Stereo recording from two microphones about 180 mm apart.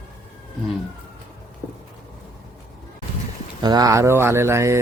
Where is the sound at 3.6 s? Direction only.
20° right (ahead or behind).